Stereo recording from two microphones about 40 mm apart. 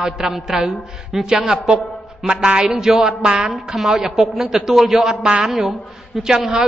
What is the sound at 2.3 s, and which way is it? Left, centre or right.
Speech, right.